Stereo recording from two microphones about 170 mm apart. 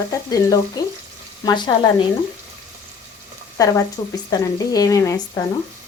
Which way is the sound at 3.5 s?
20° left (ahead or behind).